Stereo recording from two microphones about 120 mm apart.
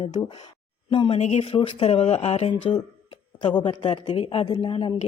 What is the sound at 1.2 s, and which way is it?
Speech, 65° left (ahead or behind).